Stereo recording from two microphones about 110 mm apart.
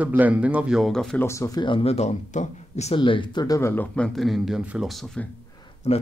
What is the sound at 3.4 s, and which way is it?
Speech, 30° left (ahead or behind).